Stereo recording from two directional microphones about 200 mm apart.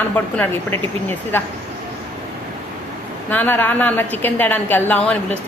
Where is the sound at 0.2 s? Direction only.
10° left (ahead or behind).